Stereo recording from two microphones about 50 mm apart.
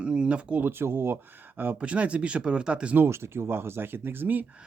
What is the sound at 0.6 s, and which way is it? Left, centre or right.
Speech, right.